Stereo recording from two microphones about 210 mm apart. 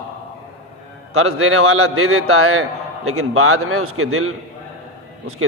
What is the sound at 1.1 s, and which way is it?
A man's voice, 85° right.